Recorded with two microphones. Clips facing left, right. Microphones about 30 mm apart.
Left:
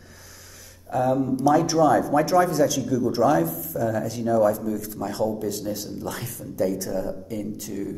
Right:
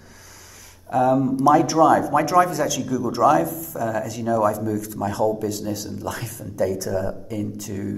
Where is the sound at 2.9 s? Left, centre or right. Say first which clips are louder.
Right 2 dB; right.